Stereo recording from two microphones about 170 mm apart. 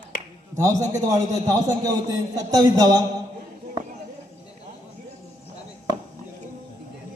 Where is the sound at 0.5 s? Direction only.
20° right (ahead or behind).